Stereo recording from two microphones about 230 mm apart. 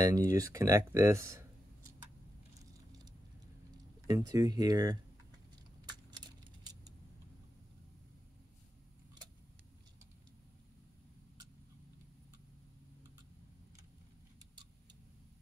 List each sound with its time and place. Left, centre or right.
0.0 s speech: centre
2.6 s a sound: centre
4.1 s speech: centre
6.1 s keys jangling: centre